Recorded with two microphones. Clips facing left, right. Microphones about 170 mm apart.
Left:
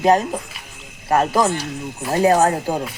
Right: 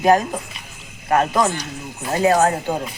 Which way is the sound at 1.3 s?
5° left (ahead or behind).